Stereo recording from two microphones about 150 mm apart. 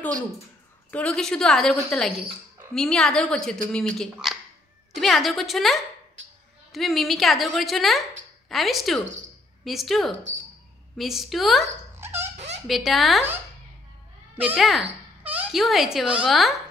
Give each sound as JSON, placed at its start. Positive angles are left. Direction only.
{"t": 0.9, "sound": "a woman's voice", "side_deg": 5}
{"t": 12.0, "sound": "dog", "side_deg": -15}
{"t": 12.6, "sound": "a woman's voice", "side_deg": 0}
{"t": 14.3, "sound": "a child's voice", "side_deg": -10}
{"t": 14.6, "sound": "a woman's voice", "side_deg": 0}
{"t": 15.2, "sound": "a sound", "side_deg": -10}
{"t": 15.6, "sound": "a woman's voice", "side_deg": 0}